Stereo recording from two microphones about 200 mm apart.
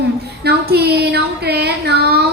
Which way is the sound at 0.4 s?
55° right (ahead or behind).